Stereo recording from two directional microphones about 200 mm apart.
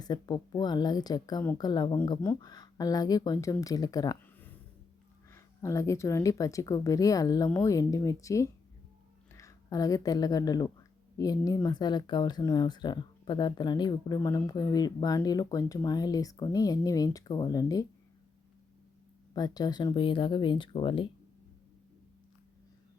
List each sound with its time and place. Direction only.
0.0 s a woman's voice: 20° left (ahead or behind)
19.3 s speech: 20° left (ahead or behind)